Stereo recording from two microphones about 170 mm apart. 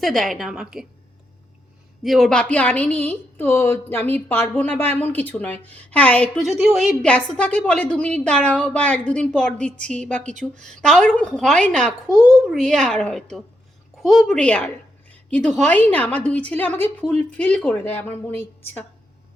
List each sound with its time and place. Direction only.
0.0 s a woman's voice: centre (ahead or behind)
2.0 s a woman's voice: centre (ahead or behind)
12.0 s a child's voice: 25° left (ahead or behind)
12.5 s a woman's voice: 5° left (ahead or behind)